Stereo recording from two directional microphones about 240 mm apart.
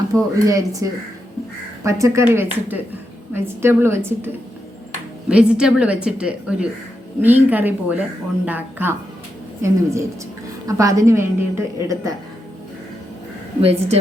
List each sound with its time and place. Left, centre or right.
0.1 s a woman's voice: centre
5.3 s a woman's voice: centre
13.6 s a woman's voice: right